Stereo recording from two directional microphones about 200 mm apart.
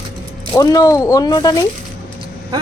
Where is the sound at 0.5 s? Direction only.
20° left (ahead or behind).